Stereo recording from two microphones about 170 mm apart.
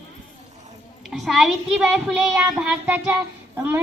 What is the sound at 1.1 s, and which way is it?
A child's voice, centre (ahead or behind).